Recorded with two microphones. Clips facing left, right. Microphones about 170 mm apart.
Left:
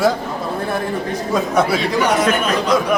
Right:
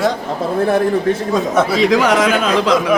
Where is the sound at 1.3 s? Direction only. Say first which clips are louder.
Left 2 dB; centre (ahead or behind).